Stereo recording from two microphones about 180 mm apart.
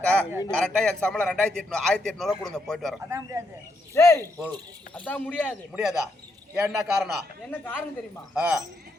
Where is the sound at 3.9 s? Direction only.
15° left (ahead or behind).